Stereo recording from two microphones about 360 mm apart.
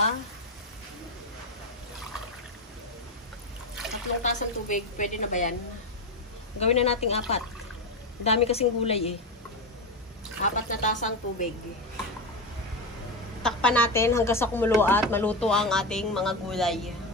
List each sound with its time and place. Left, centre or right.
4.2 s a woman's voice: left
6.6 s a woman's voice: centre
10.4 s a woman's voice: left
13.4 s a woman's voice: centre